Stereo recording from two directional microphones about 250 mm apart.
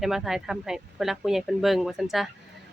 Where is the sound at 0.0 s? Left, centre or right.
Centre.